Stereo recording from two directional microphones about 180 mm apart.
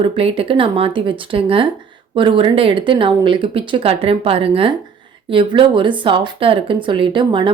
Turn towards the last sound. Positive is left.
turn(degrees=-25)  # may be behind; listen again after turning